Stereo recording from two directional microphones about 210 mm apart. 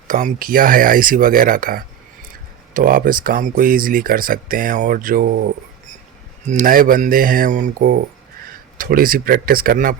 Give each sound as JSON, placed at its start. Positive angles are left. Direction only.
{"t": 0.1, "sound": "speech", "side_deg": -40}
{"t": 6.4, "sound": "speech", "side_deg": -35}